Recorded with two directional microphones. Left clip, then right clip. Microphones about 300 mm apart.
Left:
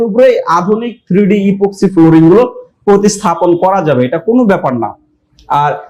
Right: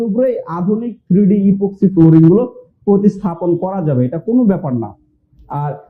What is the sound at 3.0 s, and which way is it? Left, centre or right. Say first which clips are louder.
Speech: left 7 dB; centre.